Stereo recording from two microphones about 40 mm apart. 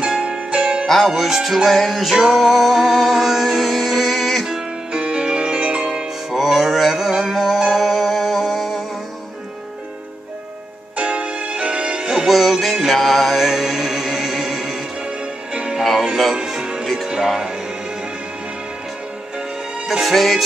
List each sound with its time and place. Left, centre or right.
0.2 s music: right
1.0 s music: centre
4.5 s music: centre
6.3 s music: centre
11.0 s music: right
12.3 s music: centre
15.0 s music: right
16.3 s music: centre
16.8 s music: centre
17.3 s music: centre
19.9 s music: centre